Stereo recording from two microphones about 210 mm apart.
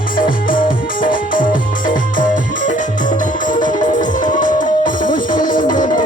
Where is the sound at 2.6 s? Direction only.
40° left (ahead or behind).